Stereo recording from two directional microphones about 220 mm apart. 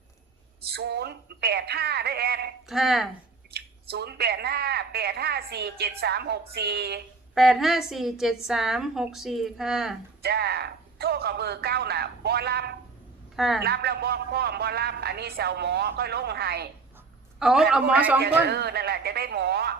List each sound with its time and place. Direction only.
0.7 s a man's voice: 45° right (ahead or behind)
2.6 s a woman's voice: centre (ahead or behind)
3.5 s a man's voice: 50° right (ahead or behind)
7.3 s a woman's voice: centre (ahead or behind)
10.2 s a man's voice: 45° right (ahead or behind)
13.3 s a woman's voice: centre (ahead or behind)
13.6 s a man's voice: 45° right (ahead or behind)
17.4 s a woman's voice: centre (ahead or behind)
18.4 s a man's voice: 50° right (ahead or behind)